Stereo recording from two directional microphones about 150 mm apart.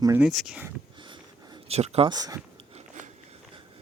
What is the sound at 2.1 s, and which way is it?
Speech, 25° right (ahead or behind).